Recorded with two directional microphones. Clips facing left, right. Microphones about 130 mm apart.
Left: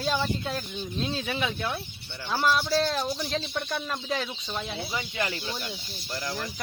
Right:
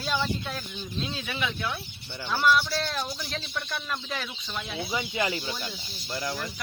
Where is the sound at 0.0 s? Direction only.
40° left (ahead or behind).